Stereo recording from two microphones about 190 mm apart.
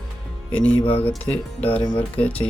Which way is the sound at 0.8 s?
30° left (ahead or behind).